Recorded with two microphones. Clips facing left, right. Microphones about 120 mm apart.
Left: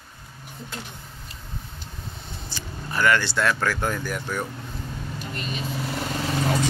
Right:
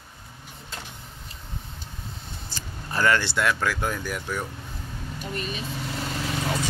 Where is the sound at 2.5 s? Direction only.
30° right (ahead or behind).